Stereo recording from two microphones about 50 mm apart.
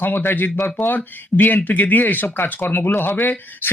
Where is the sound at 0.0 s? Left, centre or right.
Left.